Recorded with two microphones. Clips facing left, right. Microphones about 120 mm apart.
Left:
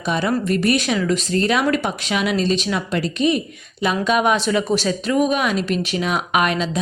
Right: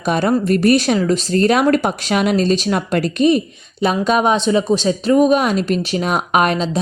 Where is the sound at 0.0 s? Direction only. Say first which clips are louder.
Right 4 dB; 45° right (ahead or behind); by 4.9 s 25° right (ahead or behind).